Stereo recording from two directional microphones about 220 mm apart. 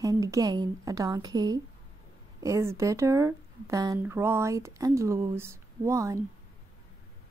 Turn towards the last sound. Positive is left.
turn(degrees=-15)  # may be behind; listen again after turning